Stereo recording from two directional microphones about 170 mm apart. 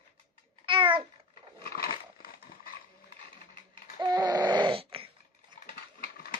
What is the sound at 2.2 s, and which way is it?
Horse, 60° left (ahead or behind).